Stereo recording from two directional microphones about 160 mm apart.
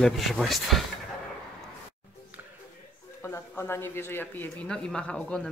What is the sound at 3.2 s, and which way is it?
Speech, 15° left (ahead or behind).